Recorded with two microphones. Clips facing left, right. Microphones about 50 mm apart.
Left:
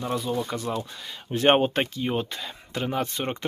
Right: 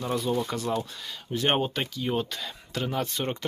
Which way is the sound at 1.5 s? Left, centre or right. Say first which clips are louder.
Left 7 dB; left.